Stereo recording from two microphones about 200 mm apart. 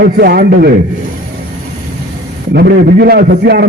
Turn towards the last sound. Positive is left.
turn(degrees=-55)  # may be behind; listen again after turning